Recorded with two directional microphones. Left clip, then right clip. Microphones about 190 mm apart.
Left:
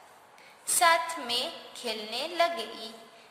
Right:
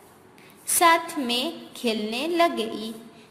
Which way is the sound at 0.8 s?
30° right (ahead or behind).